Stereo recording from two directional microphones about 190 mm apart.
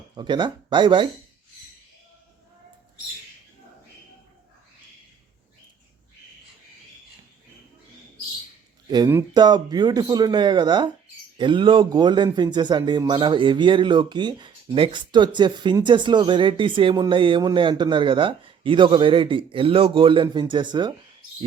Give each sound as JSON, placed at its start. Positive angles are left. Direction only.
{"t": 0.2, "sound": "speech", "side_deg": -25}
{"t": 8.9, "sound": "speech", "side_deg": -15}